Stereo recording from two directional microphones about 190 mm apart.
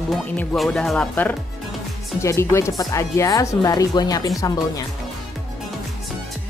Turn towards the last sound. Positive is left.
turn(degrees=20)  # may be behind; listen again after turning